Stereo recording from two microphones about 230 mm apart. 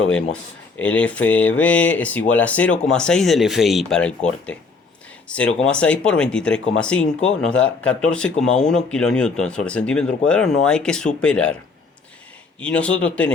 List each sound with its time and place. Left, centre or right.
0.8 s speech: centre
12.5 s speech: centre